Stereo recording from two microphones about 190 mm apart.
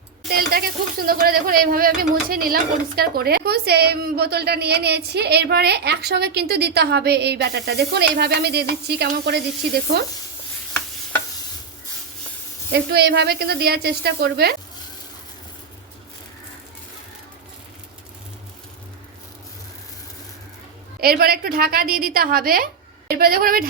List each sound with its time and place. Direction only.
0.3 s speech: 55° right (ahead or behind)
12.7 s speech: 60° right (ahead or behind)
21.0 s a woman's voice: 55° right (ahead or behind)